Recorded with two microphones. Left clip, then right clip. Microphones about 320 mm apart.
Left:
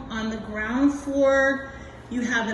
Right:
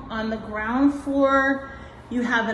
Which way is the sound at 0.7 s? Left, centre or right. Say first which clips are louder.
Right 2 dB; centre.